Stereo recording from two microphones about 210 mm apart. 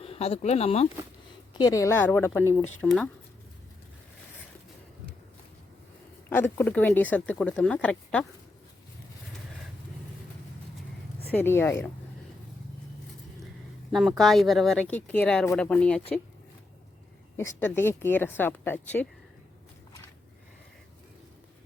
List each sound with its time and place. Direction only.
0.0 s speech: 30° left (ahead or behind)
1.5 s speech: 15° left (ahead or behind)
6.3 s speech: 10° left (ahead or behind)
11.3 s speech: 10° left (ahead or behind)
13.9 s speech: centre (ahead or behind)
17.6 s speech: 10° left (ahead or behind)